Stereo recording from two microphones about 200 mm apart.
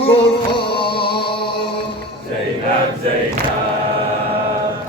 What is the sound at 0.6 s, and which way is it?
Music, 25° left (ahead or behind).